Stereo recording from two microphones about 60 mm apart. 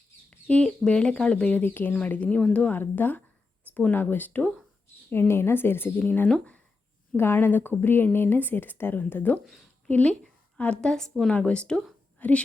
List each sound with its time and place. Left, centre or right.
0.3 s bird: centre
0.9 s speech: centre
1.5 s speech: left
2.7 s speech: left
5.3 s speech: left
6.1 s speech: left
7.2 s speech: left
9.9 s a woman's voice: left
11.3 s speech: left